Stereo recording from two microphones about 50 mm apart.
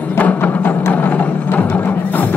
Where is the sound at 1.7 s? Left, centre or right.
Left.